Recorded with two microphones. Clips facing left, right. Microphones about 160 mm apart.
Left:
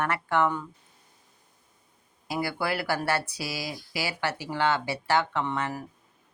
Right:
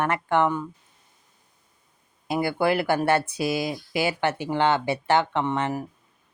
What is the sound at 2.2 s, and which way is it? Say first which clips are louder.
Speech: right 7 dB; 20° right (ahead or behind).